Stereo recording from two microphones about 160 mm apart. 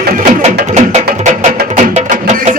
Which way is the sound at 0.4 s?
45° right (ahead or behind).